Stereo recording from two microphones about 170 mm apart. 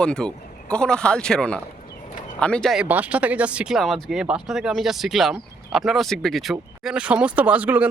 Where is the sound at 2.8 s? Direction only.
10° right (ahead or behind).